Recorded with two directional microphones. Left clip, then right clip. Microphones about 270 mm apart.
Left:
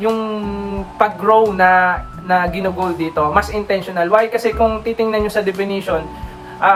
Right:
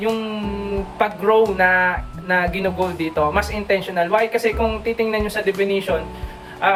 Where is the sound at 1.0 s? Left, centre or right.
Centre.